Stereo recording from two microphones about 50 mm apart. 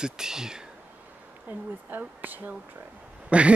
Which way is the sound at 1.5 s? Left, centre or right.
Right.